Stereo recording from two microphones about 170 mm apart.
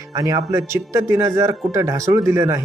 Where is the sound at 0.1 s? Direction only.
20° right (ahead or behind).